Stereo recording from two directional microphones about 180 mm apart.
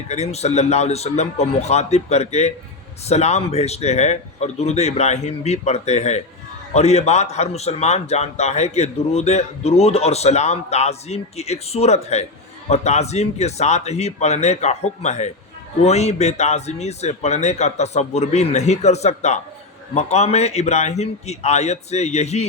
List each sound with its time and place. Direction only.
0.1 s a man's voice: 35° left (ahead or behind)